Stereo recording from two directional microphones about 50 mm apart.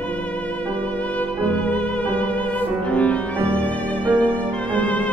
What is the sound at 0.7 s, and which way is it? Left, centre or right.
Music, left.